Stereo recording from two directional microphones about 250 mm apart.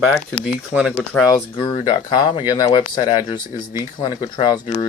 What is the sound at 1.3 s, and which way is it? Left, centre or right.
Speech, centre.